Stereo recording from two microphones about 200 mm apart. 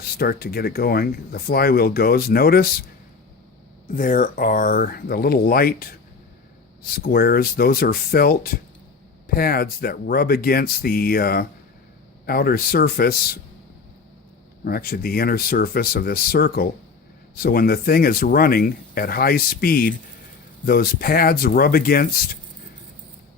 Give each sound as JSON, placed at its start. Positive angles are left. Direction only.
{"t": 0.0, "sound": "speech", "side_deg": 50}
{"t": 3.8, "sound": "speech", "side_deg": 40}
{"t": 14.6, "sound": "speech", "side_deg": 50}